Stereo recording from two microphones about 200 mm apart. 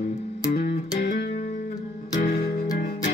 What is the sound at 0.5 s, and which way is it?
Music, 45° left (ahead or behind).